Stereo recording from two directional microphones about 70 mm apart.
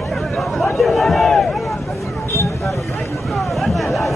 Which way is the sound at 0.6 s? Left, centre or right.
Centre.